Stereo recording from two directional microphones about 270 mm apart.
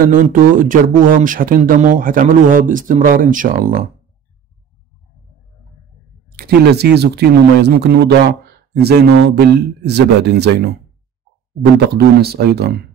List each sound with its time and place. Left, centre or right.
0.0 s speech: right
6.3 s speech: right
11.9 s speech: right